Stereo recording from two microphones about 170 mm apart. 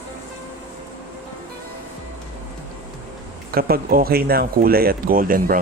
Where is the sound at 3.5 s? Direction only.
60° right (ahead or behind).